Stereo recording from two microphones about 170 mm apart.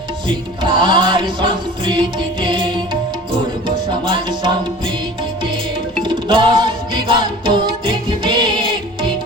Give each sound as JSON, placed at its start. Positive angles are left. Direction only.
{"t": 0.6, "sound": "music", "side_deg": -30}
{"t": 4.0, "sound": "music", "side_deg": -30}
{"t": 6.0, "sound": "music", "side_deg": -30}